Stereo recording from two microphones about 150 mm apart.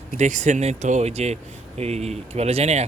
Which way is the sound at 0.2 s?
50° right (ahead or behind).